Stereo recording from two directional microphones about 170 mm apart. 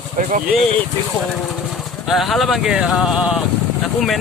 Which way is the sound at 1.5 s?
Centre (ahead or behind).